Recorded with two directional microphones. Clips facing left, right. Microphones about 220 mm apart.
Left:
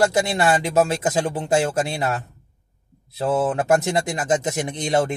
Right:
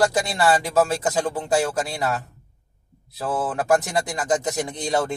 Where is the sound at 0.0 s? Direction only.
25° left (ahead or behind).